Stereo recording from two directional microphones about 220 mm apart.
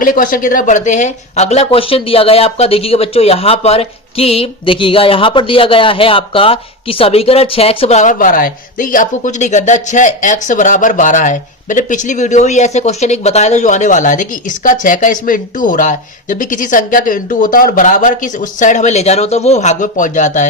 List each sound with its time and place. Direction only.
0.0 s speech: 40° left (ahead or behind)